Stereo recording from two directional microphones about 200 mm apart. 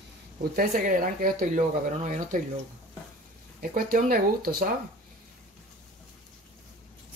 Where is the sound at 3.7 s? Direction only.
45° right (ahead or behind).